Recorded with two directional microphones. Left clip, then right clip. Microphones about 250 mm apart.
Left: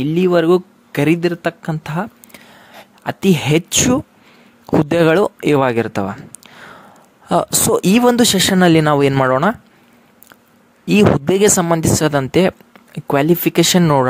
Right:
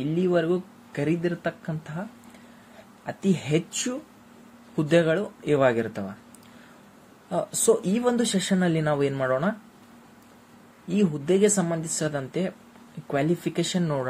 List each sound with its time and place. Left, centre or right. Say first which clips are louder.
0.0 s speech: left 10 dB; left
3.1 s speech: left 11 dB; left
7.9 s speech: left 12 dB; left
10.9 s speech: left 11 dB; left